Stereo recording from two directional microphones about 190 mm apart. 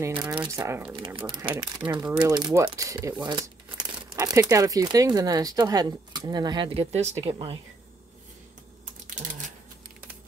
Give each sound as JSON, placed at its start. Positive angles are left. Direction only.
{"t": 0.0, "sound": "speech", "side_deg": -10}
{"t": 0.9, "sound": "speech", "side_deg": -25}
{"t": 9.0, "sound": "typing", "side_deg": -40}